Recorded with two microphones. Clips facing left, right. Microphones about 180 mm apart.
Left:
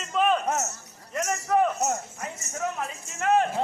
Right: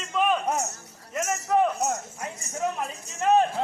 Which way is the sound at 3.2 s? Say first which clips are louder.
Right 2 dB; 20° right (ahead or behind).